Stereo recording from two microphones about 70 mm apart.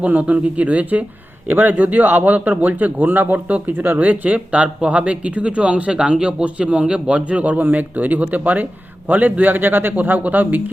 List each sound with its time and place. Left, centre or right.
0.0 s speech: right